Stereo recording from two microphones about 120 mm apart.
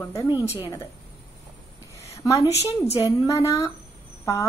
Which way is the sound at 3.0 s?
25° left (ahead or behind).